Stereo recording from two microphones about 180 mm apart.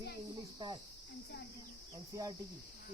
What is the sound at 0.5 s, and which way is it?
Cricket, 25° right (ahead or behind).